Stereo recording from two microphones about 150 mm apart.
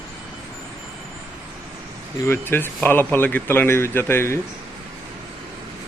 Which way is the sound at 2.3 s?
15° left (ahead or behind).